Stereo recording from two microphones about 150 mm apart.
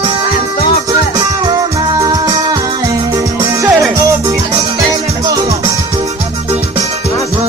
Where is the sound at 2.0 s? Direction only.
25° right (ahead or behind).